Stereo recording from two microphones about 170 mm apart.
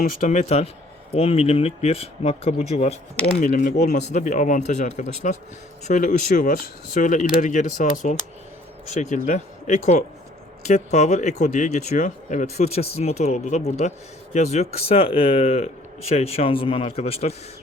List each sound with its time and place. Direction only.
0.0 s speech: 50° left (ahead or behind)
3.4 s speech: 50° left (ahead or behind)
4.1 s speech: 45° left (ahead or behind)